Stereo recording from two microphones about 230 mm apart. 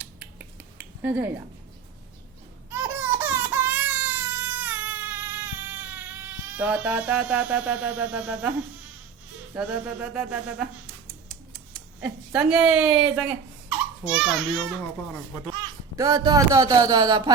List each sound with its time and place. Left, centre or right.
1.0 s speech: centre
2.6 s baby cry: centre
6.4 s music: centre
9.6 s music: centre
11.7 s speech: centre
16.0 s speech: centre